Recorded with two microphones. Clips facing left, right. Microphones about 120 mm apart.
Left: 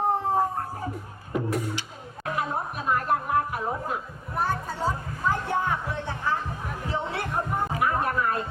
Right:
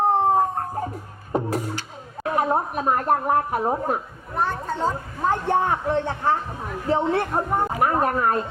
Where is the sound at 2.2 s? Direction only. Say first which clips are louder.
Right 7 dB; 45° right (ahead or behind).